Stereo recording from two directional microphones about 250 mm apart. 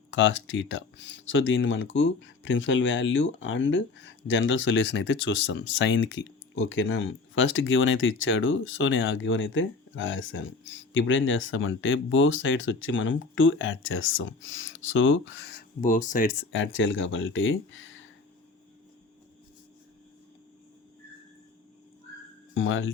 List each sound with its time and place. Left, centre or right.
0.1 s speech: left
16.5 s speech: left
22.5 s speech: left